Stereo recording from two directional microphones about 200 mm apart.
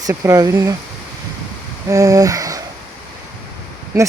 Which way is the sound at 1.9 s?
15° right (ahead or behind).